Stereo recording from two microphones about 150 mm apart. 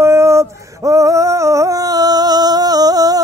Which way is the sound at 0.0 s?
20° right (ahead or behind).